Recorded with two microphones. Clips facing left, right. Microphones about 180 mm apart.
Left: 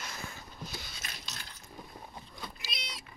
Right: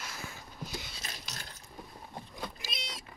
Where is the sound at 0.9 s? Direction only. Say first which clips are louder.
Right 1 dB; 45° right (ahead or behind).